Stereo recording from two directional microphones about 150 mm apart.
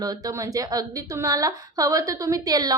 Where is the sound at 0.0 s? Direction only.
25° right (ahead or behind).